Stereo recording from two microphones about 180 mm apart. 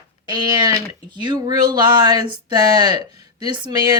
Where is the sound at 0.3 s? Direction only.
25° right (ahead or behind).